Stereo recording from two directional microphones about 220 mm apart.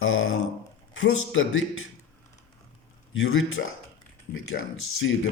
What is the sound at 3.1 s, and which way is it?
Speech, 65° left (ahead or behind).